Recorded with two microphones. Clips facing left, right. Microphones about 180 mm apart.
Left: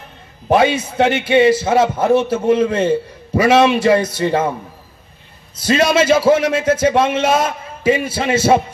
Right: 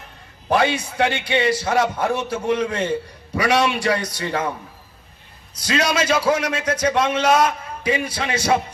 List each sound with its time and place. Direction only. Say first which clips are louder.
0.5 s a man's voice: left 5 dB; 20° left (ahead or behind)
5.6 s a man's voice: left 7 dB; 25° left (ahead or behind)